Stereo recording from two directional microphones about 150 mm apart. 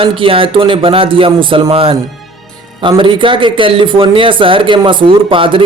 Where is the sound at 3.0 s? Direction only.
35° right (ahead or behind).